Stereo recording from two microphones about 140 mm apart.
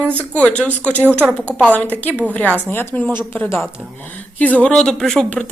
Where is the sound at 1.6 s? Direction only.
10° left (ahead or behind).